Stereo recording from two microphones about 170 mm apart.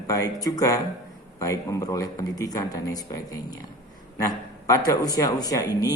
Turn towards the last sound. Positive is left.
turn(degrees=20)  # may be behind; listen again after turning